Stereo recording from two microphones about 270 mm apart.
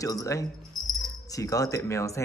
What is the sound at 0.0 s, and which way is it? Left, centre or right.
Speech, centre.